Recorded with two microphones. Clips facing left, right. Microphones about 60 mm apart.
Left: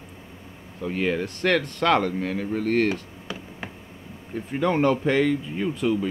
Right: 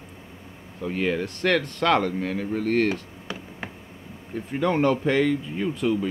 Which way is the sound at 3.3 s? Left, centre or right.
Right.